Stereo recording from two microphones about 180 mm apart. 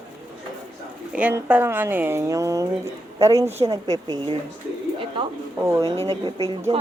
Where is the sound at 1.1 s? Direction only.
10° right (ahead or behind).